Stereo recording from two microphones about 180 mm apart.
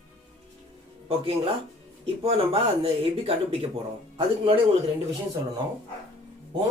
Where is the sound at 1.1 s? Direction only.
30° right (ahead or behind).